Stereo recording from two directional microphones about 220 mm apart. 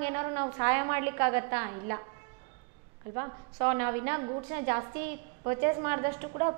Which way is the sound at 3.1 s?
20° right (ahead or behind).